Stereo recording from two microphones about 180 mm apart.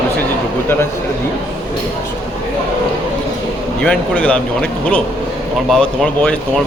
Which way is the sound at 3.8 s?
5° left (ahead or behind).